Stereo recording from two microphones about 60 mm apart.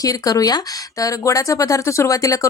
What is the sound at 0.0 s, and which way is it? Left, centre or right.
Speech, left.